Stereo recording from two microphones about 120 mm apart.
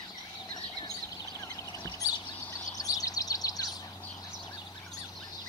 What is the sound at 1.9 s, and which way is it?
Bird, 30° left (ahead or behind).